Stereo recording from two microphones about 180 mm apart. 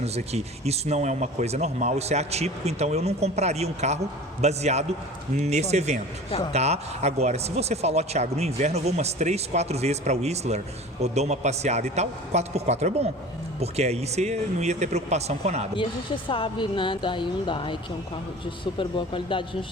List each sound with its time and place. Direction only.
0.0 s speech: 35° right (ahead or behind)
15.7 s speech: 30° left (ahead or behind)